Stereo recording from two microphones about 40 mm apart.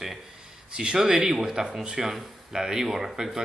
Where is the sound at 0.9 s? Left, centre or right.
Centre.